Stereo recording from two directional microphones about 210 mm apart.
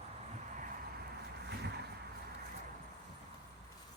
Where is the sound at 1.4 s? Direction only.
50° right (ahead or behind).